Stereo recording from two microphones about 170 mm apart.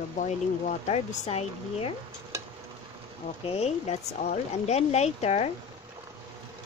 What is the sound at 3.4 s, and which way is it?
A woman's voice, 40° left (ahead or behind).